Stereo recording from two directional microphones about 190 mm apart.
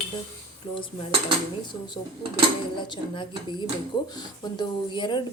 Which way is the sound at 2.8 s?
25° left (ahead or behind).